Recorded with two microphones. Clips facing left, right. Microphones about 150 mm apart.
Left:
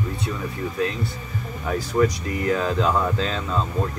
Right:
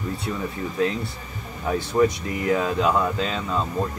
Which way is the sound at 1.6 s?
20° right (ahead or behind).